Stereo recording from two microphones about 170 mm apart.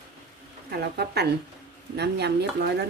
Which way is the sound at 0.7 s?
70° right (ahead or behind).